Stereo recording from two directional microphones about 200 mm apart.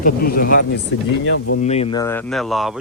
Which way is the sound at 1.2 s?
70° left (ahead or behind).